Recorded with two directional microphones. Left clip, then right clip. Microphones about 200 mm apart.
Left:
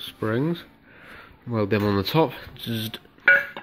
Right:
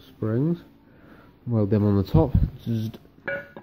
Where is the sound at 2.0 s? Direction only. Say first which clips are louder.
Left 2 dB; 5° right (ahead or behind).